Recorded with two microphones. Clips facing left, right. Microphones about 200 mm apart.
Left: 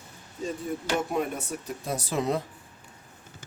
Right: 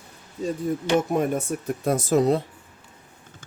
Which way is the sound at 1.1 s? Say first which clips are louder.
Right 6 dB; 45° right (ahead or behind).